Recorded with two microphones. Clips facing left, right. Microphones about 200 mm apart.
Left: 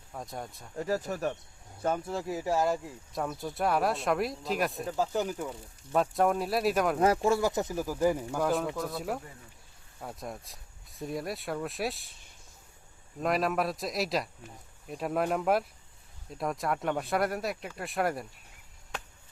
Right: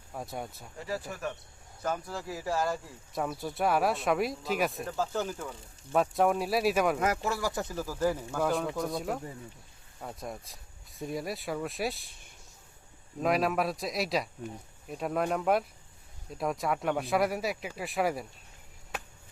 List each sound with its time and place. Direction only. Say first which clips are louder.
0.1 s speech: right 1 dB; 5° right (ahead or behind)
0.8 s speech: left 5 dB; 45° left (ahead or behind)
1.8 s speech: left 3 dB; 25° left (ahead or behind)
3.1 s speech: right 1 dB; centre (ahead or behind)
4.9 s speech: left 2 dB; 15° left (ahead or behind)
5.9 s speech: even; centre (ahead or behind)
7.0 s speech: left 5 dB; 30° left (ahead or behind); by 8.4 s 10° left (ahead or behind)
8.4 s speech: even; centre (ahead or behind)
13.2 s speech: right 1 dB; centre (ahead or behind)